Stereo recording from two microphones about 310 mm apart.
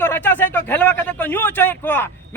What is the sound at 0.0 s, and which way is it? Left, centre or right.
Speech, centre.